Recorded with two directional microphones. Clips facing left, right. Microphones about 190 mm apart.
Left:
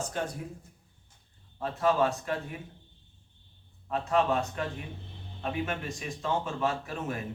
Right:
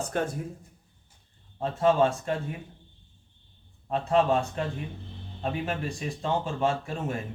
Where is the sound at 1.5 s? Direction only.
25° right (ahead or behind).